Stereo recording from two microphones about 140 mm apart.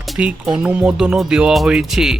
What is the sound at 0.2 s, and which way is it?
Speech, 5° right (ahead or behind).